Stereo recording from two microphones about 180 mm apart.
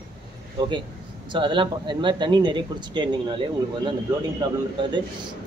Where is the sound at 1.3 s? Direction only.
25° right (ahead or behind).